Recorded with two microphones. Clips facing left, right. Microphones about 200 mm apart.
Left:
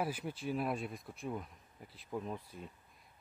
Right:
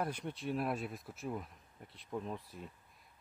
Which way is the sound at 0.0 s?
5° left (ahead or behind).